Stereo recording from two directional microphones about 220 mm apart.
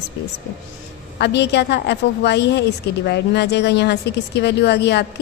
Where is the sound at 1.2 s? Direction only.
50° left (ahead or behind).